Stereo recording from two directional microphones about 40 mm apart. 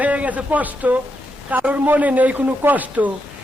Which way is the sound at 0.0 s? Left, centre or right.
Right.